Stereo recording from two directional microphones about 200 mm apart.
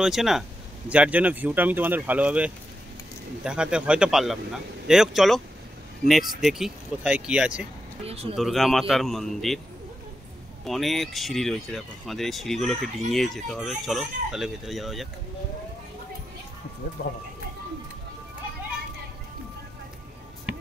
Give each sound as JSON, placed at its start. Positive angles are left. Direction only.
{"t": 0.0, "sound": "speech", "side_deg": 0}
{"t": 8.0, "sound": "speech", "side_deg": -30}
{"t": 8.4, "sound": "speech", "side_deg": 0}
{"t": 10.6, "sound": "speech", "side_deg": 0}